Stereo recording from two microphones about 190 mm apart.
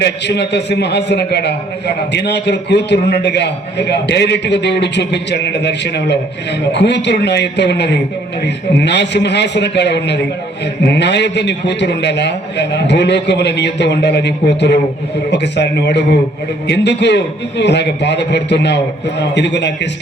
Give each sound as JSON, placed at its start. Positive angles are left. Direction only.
{"t": 0.0, "sound": "a man's voice", "side_deg": 65}